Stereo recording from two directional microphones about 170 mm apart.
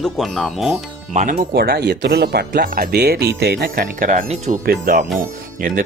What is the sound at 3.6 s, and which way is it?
Speech, 55° right (ahead or behind).